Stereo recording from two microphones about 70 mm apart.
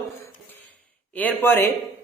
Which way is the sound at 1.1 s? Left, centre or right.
Left.